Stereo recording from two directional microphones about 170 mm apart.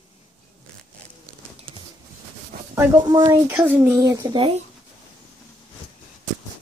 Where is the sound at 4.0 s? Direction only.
25° right (ahead or behind).